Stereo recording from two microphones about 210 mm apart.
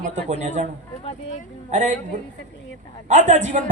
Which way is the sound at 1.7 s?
35° right (ahead or behind).